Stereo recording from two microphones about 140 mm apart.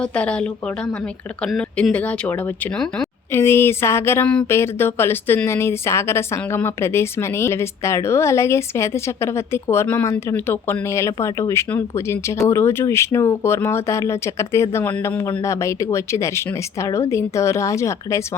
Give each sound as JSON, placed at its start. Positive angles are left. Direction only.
{"t": 0.0, "sound": "speech", "side_deg": 10}
{"t": 1.5, "sound": "a woman's voice", "side_deg": 5}
{"t": 3.3, "sound": "speech", "side_deg": 15}
{"t": 4.3, "sound": "a woman's voice", "side_deg": 5}